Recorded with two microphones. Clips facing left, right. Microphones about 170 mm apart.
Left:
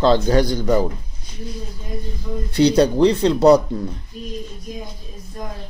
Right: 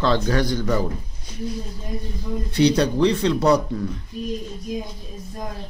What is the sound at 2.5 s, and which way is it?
Speech, 35° left (ahead or behind).